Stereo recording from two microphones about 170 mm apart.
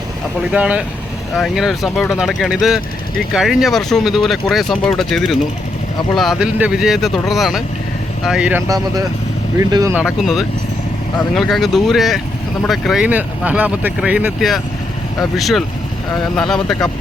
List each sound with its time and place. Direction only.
0.5 s speech: 5° right (ahead or behind)
8.6 s speech: 20° right (ahead or behind)
10.0 s speech: 5° right (ahead or behind)